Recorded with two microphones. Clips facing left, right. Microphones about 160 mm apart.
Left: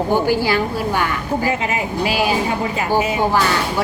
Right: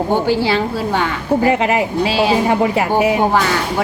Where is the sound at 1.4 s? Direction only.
70° right (ahead or behind).